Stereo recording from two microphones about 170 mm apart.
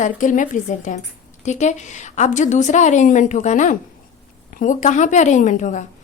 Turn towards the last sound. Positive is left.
turn(degrees=45)  # may be behind; listen again after turning